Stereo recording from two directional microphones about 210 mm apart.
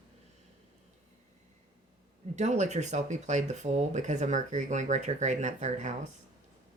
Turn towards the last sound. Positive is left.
turn(degrees=-35)  # may be behind; listen again after turning